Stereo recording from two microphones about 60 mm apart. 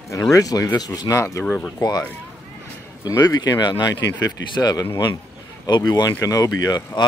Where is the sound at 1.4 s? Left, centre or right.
Centre.